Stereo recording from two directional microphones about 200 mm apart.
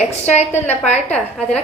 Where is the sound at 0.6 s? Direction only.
35° left (ahead or behind).